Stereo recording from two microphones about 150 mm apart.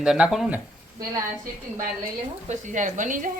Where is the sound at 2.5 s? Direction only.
55° right (ahead or behind).